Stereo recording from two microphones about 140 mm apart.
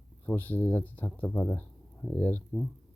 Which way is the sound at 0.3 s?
15° left (ahead or behind).